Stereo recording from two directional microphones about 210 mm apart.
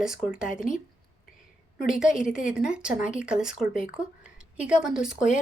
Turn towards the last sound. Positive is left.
turn(degrees=-5)  # may be behind; listen again after turning